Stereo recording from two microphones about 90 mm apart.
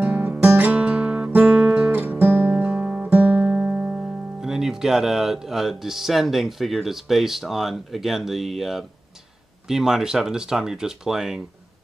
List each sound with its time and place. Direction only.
0.0 s music: 20° right (ahead or behind); by 8.8 s centre (ahead or behind)
9.7 s speech: 5° right (ahead or behind)